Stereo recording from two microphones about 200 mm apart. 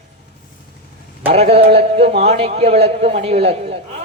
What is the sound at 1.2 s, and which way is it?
A man's voice, 30° right (ahead or behind).